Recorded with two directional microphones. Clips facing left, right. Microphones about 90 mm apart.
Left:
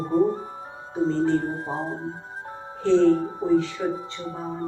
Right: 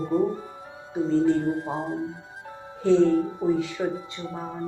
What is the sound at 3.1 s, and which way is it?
Music, 40° left (ahead or behind).